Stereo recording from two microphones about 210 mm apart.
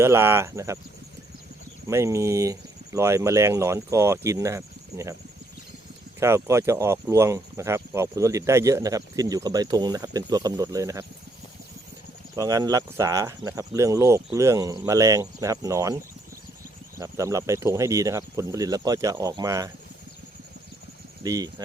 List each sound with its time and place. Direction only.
0.0 s speech: 10° right (ahead or behind)
1.9 s speech: 15° right (ahead or behind)
6.1 s speech: 10° right (ahead or behind)
12.4 s speech: 15° right (ahead or behind)
17.0 s speech: 15° right (ahead or behind)
21.2 s speech: 15° right (ahead or behind)